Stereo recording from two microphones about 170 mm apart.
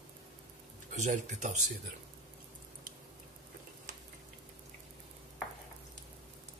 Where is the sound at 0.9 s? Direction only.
45° right (ahead or behind).